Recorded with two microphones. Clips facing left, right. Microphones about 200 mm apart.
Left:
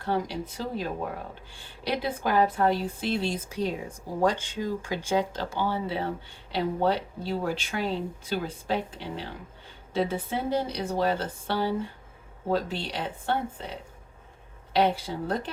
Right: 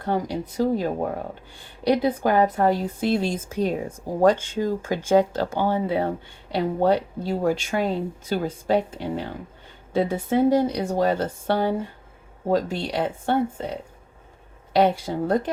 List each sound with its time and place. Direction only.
0.0 s a woman's voice: 45° right (ahead or behind)
14.8 s a woman's voice: 45° right (ahead or behind)